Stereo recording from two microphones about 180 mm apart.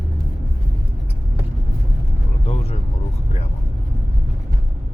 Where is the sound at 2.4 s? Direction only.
35° left (ahead or behind).